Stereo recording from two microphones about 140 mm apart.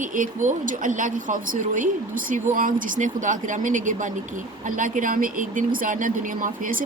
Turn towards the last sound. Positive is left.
turn(degrees=-75)  # may be behind; listen again after turning